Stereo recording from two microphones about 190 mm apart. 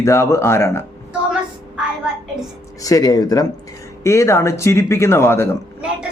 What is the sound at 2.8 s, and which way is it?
Speech, 20° left (ahead or behind).